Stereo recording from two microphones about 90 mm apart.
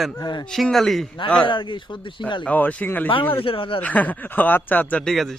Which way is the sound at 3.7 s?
15° left (ahead or behind).